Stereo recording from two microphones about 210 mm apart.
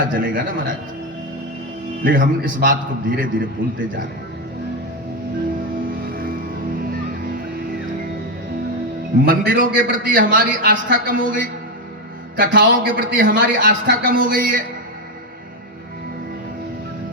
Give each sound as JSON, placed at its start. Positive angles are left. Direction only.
{"t": 0.0, "sound": "a man's voice", "side_deg": -40}
{"t": 2.0, "sound": "a man's voice", "side_deg": -40}
{"t": 6.1, "sound": "music", "side_deg": -45}
{"t": 9.2, "sound": "a man's voice", "side_deg": -40}